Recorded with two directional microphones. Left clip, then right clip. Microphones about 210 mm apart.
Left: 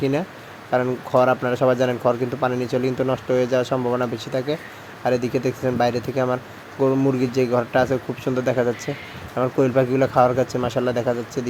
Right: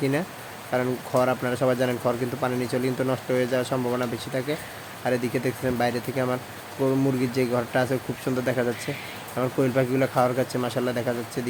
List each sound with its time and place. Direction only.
0.7 s speech: 15° left (ahead or behind)